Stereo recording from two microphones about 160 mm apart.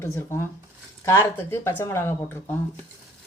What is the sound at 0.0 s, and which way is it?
Speech, 15° left (ahead or behind).